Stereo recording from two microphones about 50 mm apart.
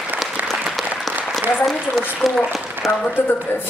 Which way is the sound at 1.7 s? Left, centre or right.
Centre.